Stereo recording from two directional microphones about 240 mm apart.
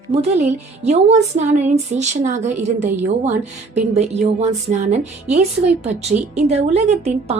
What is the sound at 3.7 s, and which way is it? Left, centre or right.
A woman's voice, right.